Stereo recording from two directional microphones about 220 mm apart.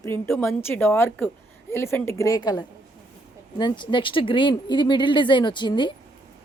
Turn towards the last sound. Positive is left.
turn(degrees=20)  # may be behind; listen again after turning